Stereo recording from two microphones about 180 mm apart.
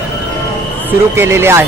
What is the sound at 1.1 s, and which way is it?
Speech, 15° right (ahead or behind).